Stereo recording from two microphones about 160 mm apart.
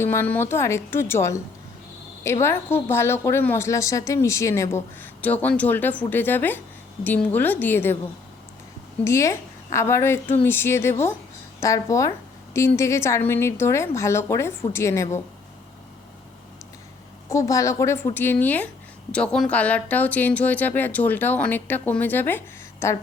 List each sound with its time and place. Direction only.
0.0 s a woman's voice: 15° left (ahead or behind)
9.0 s a woman's voice: 15° left (ahead or behind)
17.2 s a woman's voice: 20° left (ahead or behind)